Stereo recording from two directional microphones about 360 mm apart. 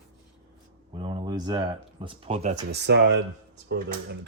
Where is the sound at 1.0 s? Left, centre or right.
Centre.